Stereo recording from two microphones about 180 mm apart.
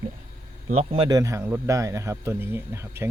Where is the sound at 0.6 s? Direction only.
35° right (ahead or behind).